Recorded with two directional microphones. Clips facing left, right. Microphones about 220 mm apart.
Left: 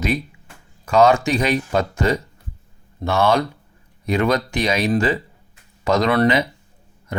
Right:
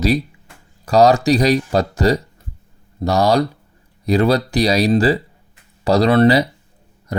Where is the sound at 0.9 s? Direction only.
35° right (ahead or behind).